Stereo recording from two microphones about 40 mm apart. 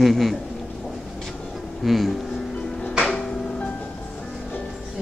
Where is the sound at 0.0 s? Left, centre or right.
Centre.